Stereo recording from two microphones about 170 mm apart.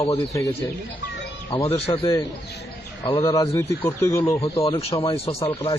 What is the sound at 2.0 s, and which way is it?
Speech, 20° left (ahead or behind).